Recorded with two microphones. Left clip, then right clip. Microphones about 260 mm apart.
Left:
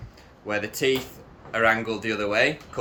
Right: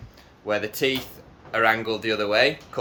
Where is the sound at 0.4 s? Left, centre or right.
Centre.